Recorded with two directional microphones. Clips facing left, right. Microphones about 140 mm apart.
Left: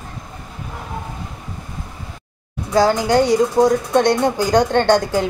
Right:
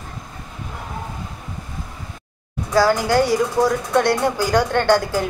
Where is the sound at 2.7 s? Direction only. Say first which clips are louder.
Left 2 dB; 20° left (ahead or behind).